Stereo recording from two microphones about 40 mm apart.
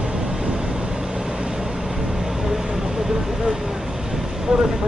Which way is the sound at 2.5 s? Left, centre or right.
Centre.